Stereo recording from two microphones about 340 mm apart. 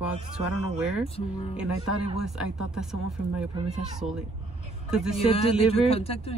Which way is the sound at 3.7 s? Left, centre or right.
Centre.